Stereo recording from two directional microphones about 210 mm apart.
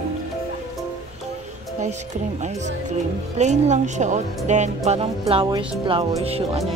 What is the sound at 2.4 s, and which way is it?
Speech, 35° right (ahead or behind).